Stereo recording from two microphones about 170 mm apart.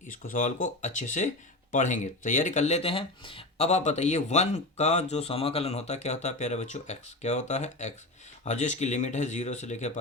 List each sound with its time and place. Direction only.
0.1 s speech: 50° left (ahead or behind)